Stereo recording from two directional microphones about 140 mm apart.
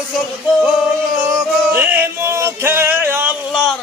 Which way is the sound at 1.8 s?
15° right (ahead or behind).